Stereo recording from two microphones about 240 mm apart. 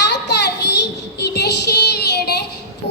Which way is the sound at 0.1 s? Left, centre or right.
Left.